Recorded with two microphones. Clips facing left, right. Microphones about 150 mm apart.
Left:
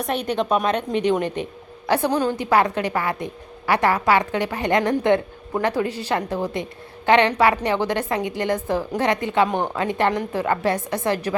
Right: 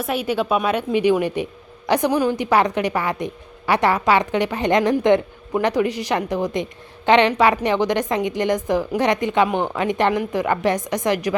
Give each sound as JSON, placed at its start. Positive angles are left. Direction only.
{"t": 0.0, "sound": "a woman's voice", "side_deg": -5}